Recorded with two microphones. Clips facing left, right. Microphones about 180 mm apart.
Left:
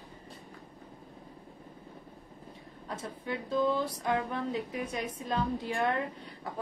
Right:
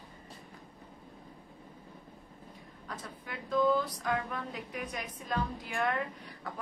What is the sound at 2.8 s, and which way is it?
A woman's voice, 25° left (ahead or behind).